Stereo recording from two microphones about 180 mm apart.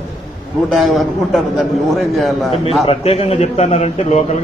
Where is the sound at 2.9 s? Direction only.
35° left (ahead or behind).